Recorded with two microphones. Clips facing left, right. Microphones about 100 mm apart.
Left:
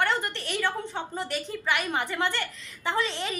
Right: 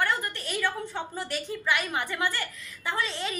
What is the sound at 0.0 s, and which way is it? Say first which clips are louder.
A woman's voice: left 2 dB; 25° left (ahead or behind).